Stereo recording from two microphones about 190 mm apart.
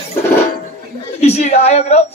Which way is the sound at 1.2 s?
35° left (ahead or behind).